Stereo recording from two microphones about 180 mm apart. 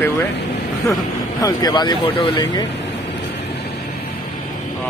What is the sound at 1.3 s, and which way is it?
Speech, 20° left (ahead or behind).